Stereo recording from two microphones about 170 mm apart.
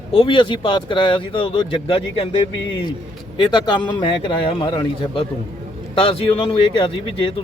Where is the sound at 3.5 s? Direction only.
25° left (ahead or behind).